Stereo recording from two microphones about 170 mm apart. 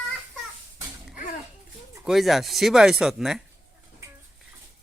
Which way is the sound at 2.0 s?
Centre (ahead or behind).